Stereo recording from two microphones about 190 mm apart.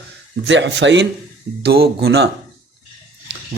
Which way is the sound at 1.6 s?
55° right (ahead or behind).